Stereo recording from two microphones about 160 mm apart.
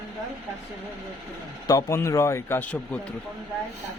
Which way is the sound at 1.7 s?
20° left (ahead or behind).